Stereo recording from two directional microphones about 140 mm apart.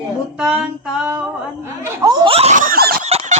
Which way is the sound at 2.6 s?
90° right.